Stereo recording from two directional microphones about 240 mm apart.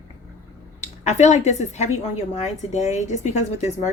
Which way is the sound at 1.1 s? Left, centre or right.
Left.